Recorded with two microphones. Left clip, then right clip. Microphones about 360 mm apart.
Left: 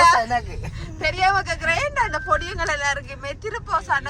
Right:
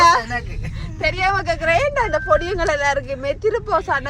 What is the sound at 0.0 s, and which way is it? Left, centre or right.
Vehicle, centre.